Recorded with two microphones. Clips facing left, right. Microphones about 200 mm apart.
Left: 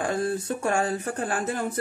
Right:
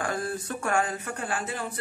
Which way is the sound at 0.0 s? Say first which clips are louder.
Left 4 dB; 25° left (ahead or behind).